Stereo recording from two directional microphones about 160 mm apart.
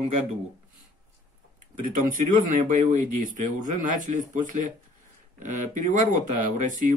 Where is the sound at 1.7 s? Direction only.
55° right (ahead or behind).